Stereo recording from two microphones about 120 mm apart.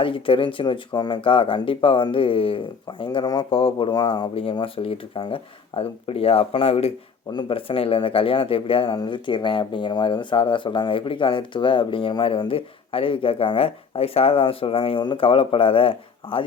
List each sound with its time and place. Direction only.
0.0 s speech: 45° left (ahead or behind)
7.3 s speech: 40° left (ahead or behind)